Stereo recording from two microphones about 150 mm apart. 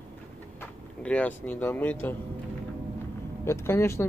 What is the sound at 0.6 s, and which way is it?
Speech, 10° left (ahead or behind).